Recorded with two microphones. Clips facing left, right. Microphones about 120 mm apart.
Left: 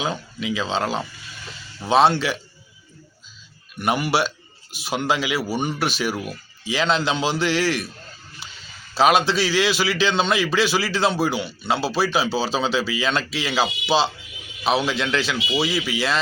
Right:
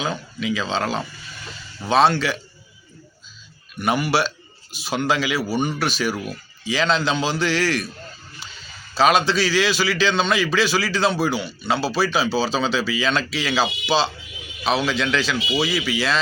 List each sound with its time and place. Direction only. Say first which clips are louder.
0.0 s a man's voice: right 1 dB; 15° left (ahead or behind)
3.8 s a man's voice: right 1 dB; 15° left (ahead or behind)
9.0 s a man's voice: even; 15° left (ahead or behind)
15.4 s speech: right 1 dB; centre (ahead or behind)